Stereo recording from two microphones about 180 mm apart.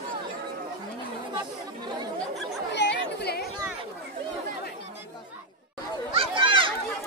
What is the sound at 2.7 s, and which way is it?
Chatter, 75° left (ahead or behind).